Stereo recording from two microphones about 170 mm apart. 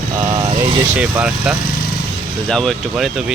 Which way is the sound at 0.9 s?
5° right (ahead or behind).